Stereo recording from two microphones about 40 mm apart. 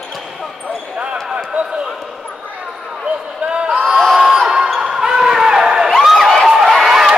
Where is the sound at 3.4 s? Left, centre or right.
Right.